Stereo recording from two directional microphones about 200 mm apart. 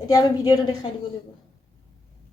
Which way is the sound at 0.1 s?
20° left (ahead or behind).